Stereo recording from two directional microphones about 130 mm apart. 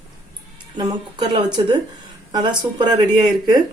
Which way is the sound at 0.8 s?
35° right (ahead or behind).